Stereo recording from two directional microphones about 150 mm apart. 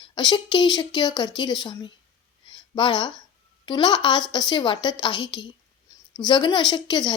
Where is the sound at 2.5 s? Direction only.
35° left (ahead or behind).